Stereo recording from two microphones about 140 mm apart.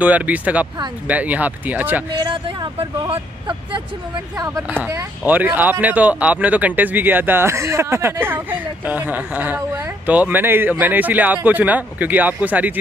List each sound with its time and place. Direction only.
0.0 s speech: 10° right (ahead or behind)
2.1 s speech: 35° right (ahead or behind)
4.8 s speech: 15° right (ahead or behind)